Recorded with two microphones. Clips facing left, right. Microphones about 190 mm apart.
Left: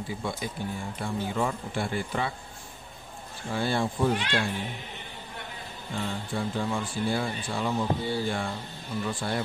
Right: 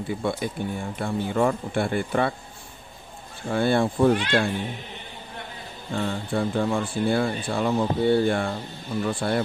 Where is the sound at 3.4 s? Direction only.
60° right (ahead or behind).